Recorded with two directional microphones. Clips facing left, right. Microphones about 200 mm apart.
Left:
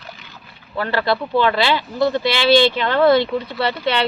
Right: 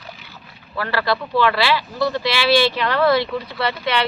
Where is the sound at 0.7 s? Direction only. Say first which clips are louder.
Left 2 dB; 25° left (ahead or behind).